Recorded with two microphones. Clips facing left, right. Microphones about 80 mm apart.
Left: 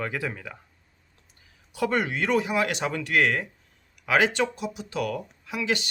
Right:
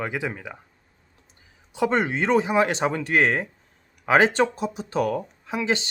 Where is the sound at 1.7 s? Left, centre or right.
Right.